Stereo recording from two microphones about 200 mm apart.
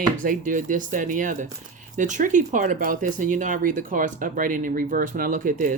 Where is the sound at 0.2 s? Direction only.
40° right (ahead or behind).